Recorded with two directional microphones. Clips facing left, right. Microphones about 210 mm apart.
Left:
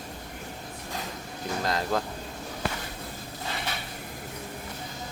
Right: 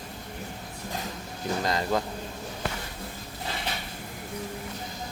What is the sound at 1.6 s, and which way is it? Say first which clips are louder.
Speech: even; centre (ahead or behind).